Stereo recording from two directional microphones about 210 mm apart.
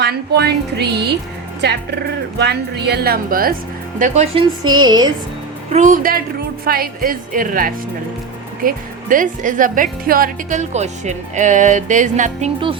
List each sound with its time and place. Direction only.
0.0 s a woman's voice: 50° right (ahead or behind); by 4.4 s 30° right (ahead or behind)
4.6 s music: 20° right (ahead or behind)
5.7 s a woman's voice: 40° right (ahead or behind)